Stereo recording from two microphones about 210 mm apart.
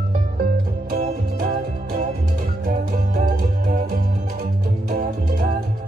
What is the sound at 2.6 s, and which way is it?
Music, 40° right (ahead or behind).